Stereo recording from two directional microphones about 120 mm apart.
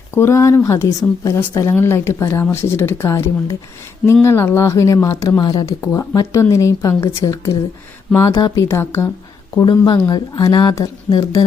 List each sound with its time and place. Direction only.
0.1 s speech: 20° left (ahead or behind)
5.8 s speech: 25° left (ahead or behind)
8.6 s speech: 20° left (ahead or behind)
9.8 s speech: 40° left (ahead or behind)